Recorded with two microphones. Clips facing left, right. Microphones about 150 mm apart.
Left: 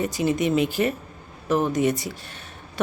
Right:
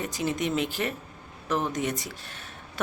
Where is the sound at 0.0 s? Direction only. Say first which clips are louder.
Left 6 dB; centre (ahead or behind).